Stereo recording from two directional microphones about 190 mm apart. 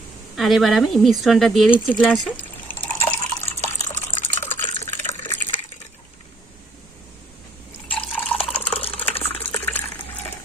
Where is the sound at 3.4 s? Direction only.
10° left (ahead or behind).